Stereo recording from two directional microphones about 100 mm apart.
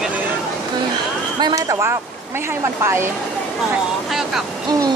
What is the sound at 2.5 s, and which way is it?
Speech, 25° right (ahead or behind).